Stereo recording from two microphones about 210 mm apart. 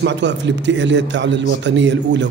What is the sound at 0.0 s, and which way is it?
Speech, 55° right (ahead or behind).